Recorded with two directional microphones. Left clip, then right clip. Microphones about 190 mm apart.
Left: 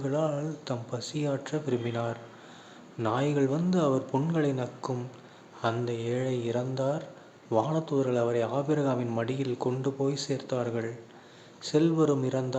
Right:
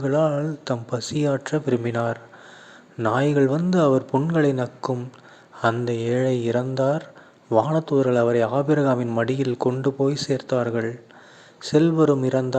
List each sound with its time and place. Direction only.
0.0 s a man's voice: 35° right (ahead or behind)